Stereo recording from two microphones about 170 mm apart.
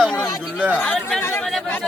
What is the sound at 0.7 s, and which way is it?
A man's voice, 5° left (ahead or behind).